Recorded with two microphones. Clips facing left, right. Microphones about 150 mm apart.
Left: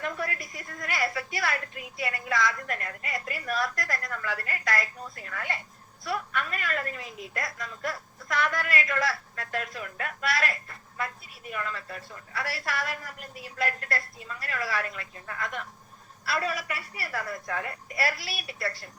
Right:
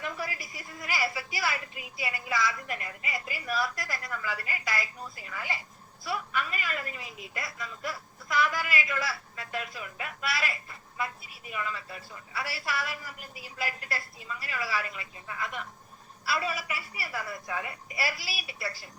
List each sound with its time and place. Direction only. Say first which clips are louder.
0.0 s a woman's voice: left 3 dB; 5° right (ahead or behind)